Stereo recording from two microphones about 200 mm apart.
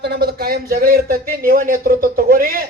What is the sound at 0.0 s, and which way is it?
A man's voice, 55° right (ahead or behind).